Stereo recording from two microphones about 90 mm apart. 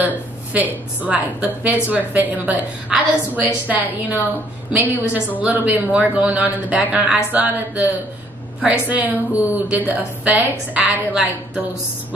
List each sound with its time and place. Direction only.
1.0 s a woman's voice: 15° right (ahead or behind)